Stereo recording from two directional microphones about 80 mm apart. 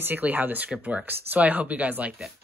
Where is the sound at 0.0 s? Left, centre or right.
Right.